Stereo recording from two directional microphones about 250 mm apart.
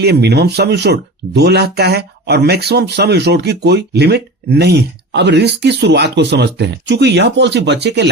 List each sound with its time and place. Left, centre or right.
0.0 s speech: right